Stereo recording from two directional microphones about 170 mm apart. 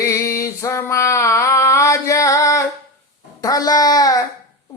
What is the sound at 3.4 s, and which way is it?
Speech, 20° left (ahead or behind).